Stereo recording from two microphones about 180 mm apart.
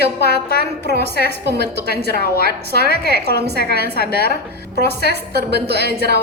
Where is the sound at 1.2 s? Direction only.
65° right (ahead or behind).